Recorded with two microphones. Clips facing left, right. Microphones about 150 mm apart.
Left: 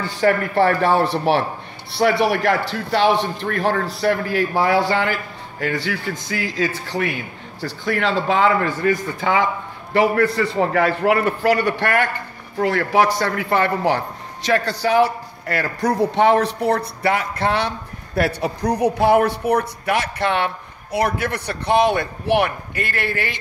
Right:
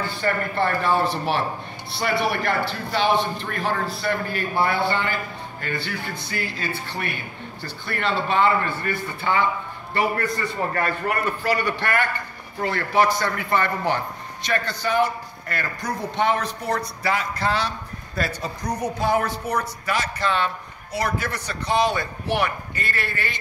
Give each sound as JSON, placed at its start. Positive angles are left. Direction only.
{"t": 0.1, "sound": "a man's voice", "side_deg": 90}
{"t": 12.6, "sound": "a man's voice", "side_deg": 80}